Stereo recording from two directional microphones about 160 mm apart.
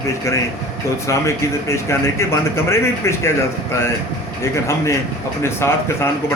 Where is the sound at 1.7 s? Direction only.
15° left (ahead or behind).